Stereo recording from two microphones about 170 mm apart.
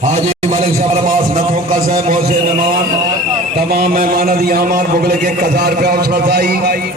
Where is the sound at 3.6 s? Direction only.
60° right (ahead or behind).